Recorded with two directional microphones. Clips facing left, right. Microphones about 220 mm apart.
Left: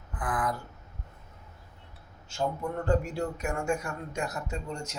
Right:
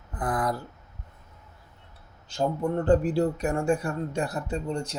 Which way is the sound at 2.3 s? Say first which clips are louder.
Right 5 dB; 30° right (ahead or behind).